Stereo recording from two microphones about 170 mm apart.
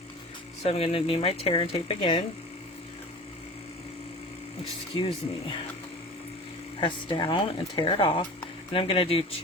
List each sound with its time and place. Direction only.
0.6 s speech: 35° left (ahead or behind)
4.9 s speech: 30° left (ahead or behind)
6.7 s speech: 30° left (ahead or behind)